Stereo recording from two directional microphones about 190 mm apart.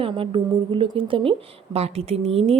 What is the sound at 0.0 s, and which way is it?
A woman's voice, 25° right (ahead or behind).